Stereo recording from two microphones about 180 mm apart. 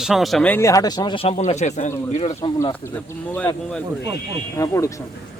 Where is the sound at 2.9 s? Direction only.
10° left (ahead or behind).